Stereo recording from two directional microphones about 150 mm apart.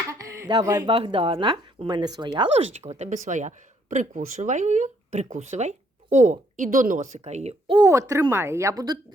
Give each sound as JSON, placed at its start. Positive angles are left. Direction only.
{"t": 0.1, "sound": "speech", "side_deg": -20}
{"t": 7.7, "sound": "speech", "side_deg": -25}